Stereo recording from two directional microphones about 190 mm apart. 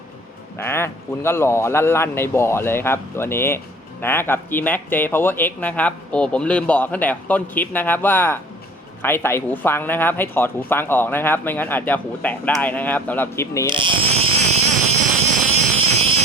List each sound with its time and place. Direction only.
0.6 s speech: 15° left (ahead or behind)
13.7 s a sound: 25° right (ahead or behind)
15.5 s vehicle: 35° right (ahead or behind)